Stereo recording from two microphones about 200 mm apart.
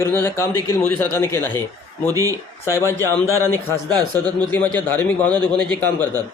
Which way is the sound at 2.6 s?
15° left (ahead or behind).